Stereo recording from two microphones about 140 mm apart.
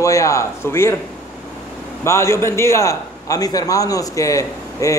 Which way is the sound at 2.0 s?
20° left (ahead or behind).